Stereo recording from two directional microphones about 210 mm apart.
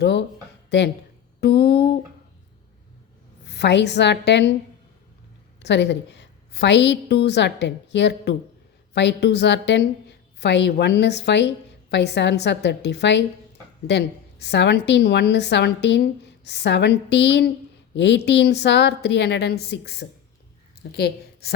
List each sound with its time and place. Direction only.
0.0 s a sound: 55° left (ahead or behind)
3.5 s a woman's voice: 55° left (ahead or behind)
5.6 s a woman's voice: 55° left (ahead or behind)